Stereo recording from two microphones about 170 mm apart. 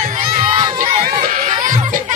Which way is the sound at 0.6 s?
20° right (ahead or behind).